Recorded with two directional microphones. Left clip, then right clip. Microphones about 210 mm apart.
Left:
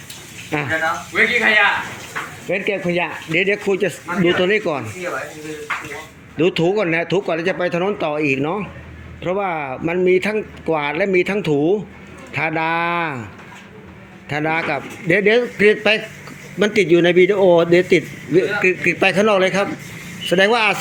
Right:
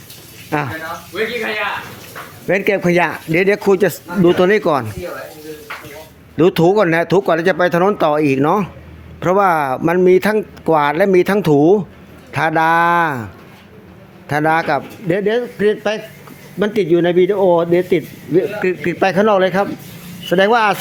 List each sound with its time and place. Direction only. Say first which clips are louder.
1.1 s speech: left 6 dB; 35° left (ahead or behind)
2.5 s speech: right 6 dB; 35° right (ahead or behind)
3.0 s speech: right 4 dB; 20° right (ahead or behind)
6.3 s speech: right 5 dB; 20° right (ahead or behind)
14.3 s speech: right 5 dB; 20° right (ahead or behind)
15.0 s a man's voice: left 4 dB; 5° right (ahead or behind)